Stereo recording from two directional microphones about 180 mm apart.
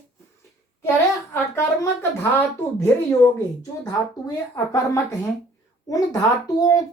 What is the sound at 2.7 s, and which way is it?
Speech, 15° left (ahead or behind).